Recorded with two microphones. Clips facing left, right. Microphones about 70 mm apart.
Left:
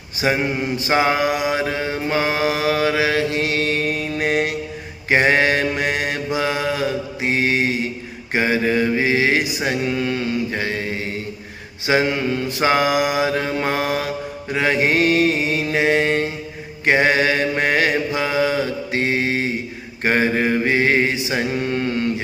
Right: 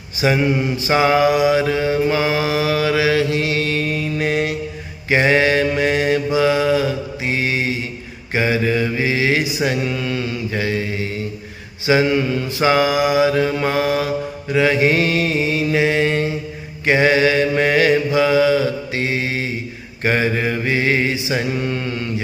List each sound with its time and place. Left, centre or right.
0.2 s mantra: left